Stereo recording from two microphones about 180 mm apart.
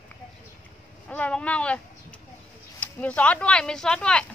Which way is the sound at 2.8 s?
10° left (ahead or behind).